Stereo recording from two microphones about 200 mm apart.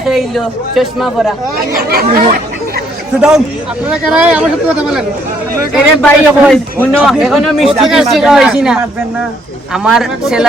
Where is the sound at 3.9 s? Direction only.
5° right (ahead or behind).